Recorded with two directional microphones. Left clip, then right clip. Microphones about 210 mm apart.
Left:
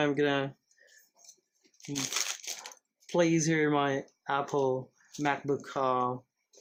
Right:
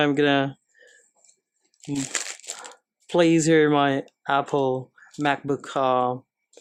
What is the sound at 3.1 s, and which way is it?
Speech, 55° right (ahead or behind).